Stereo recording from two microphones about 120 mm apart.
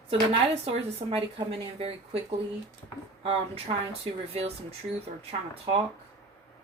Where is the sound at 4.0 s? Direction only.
55° right (ahead or behind).